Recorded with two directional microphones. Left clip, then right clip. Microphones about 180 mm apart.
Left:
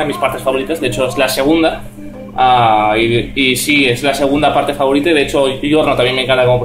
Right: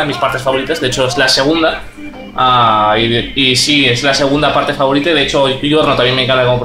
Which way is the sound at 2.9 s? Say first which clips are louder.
Right 1 dB; centre (ahead or behind).